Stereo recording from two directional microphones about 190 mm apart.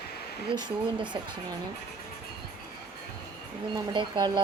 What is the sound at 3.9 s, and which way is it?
Speech, 25° right (ahead or behind).